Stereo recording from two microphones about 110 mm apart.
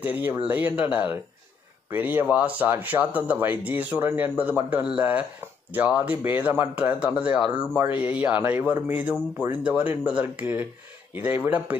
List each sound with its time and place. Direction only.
0.0 s speech: 15° right (ahead or behind)